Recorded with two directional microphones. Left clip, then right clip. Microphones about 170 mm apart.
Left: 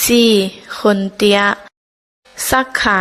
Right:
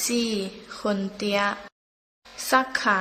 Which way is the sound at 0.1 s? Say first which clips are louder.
Left 15 dB; 55° left (ahead or behind).